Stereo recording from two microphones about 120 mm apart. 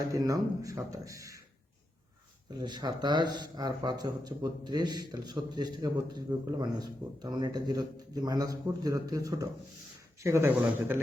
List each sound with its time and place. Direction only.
0.1 s speech: 30° right (ahead or behind)
2.6 s speech: 40° right (ahead or behind); by 11.0 s 20° right (ahead or behind)